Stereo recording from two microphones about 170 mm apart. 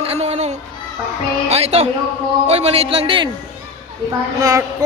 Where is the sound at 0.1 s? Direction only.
40° right (ahead or behind).